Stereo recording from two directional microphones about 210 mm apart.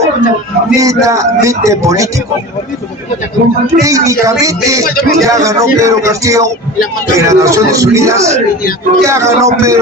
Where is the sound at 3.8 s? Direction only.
15° right (ahead or behind).